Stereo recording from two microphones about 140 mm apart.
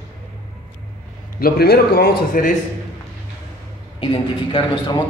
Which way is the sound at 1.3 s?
90° left.